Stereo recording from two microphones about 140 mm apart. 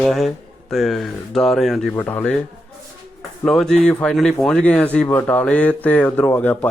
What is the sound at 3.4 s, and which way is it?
Speech, 5° left (ahead or behind).